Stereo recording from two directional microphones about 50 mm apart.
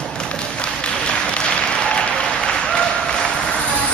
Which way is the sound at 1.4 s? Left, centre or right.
Centre.